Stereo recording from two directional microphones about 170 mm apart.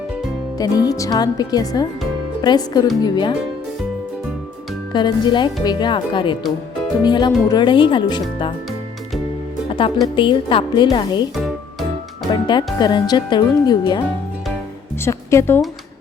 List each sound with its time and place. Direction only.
0.6 s speech: 20° left (ahead or behind)
4.9 s speech: 25° left (ahead or behind)
9.7 s speech: 30° left (ahead or behind)
12.3 s speech: 25° left (ahead or behind)
15.0 s a woman's voice: 15° left (ahead or behind)